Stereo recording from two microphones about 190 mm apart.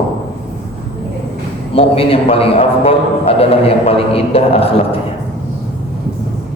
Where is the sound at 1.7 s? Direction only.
30° left (ahead or behind).